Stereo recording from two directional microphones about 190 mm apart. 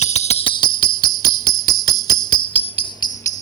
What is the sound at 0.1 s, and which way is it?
Jingle bell, 35° left (ahead or behind).